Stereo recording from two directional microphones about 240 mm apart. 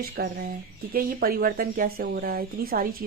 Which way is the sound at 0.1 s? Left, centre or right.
Right.